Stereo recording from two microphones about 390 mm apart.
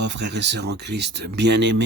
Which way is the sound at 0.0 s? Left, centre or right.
Right.